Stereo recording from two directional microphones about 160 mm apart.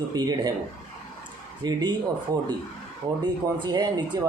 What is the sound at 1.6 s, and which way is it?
Speech, 25° right (ahead or behind).